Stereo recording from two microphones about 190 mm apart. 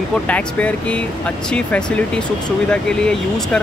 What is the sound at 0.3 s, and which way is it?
Speech, 5° left (ahead or behind).